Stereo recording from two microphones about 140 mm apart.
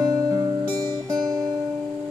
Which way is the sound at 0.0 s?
25° right (ahead or behind).